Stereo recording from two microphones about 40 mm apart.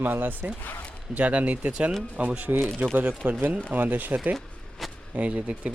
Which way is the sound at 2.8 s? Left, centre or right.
Right.